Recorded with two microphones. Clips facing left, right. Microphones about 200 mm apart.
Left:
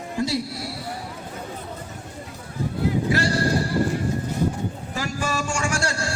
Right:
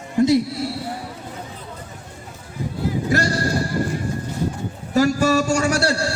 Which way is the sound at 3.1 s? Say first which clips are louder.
Right 2 dB; 45° right (ahead or behind).